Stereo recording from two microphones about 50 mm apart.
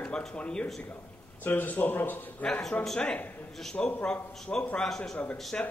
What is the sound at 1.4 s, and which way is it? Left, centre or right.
Speech, left.